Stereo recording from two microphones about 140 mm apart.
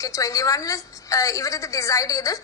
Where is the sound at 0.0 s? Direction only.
25° left (ahead or behind).